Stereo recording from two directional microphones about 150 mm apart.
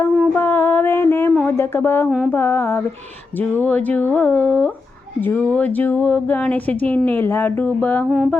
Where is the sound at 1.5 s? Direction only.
15° left (ahead or behind).